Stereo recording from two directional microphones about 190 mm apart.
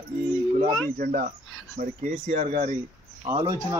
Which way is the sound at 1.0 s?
50° right (ahead or behind).